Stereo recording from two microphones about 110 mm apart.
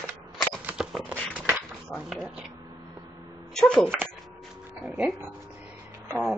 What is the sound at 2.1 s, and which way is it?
Speech, centre (ahead or behind).